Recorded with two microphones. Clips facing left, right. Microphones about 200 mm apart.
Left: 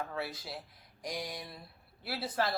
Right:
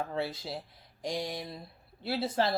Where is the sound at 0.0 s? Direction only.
25° right (ahead or behind).